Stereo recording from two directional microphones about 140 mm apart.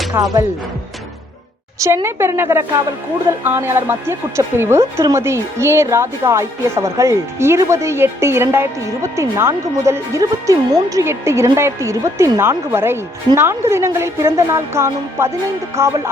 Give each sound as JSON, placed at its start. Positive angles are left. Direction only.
{"t": 0.1, "sound": "a woman's voice", "side_deg": -15}
{"t": 1.8, "sound": "a woman's voice", "side_deg": -20}